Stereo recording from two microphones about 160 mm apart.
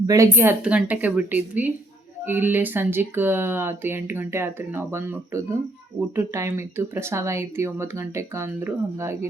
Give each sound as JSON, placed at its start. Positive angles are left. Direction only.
{"t": 0.1, "sound": "speech", "side_deg": -15}